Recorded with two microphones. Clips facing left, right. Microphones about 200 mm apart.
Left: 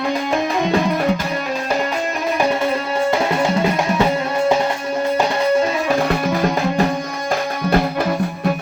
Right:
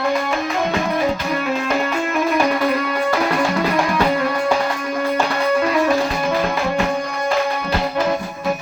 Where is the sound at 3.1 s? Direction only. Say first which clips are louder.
Left 1 dB; 25° left (ahead or behind).